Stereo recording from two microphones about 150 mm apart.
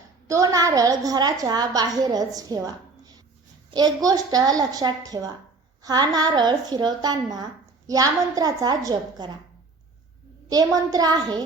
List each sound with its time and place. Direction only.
0.3 s a woman's voice: 20° right (ahead or behind)
10.5 s a woman's voice: 25° right (ahead or behind)